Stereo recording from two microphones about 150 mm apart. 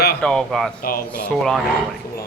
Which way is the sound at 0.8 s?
75° left (ahead or behind).